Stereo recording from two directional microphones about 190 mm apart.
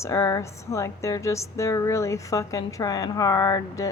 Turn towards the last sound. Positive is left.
turn(degrees=20)  # may be behind; listen again after turning